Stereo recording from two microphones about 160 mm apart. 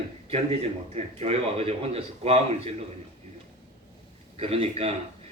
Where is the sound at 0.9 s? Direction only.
40° right (ahead or behind).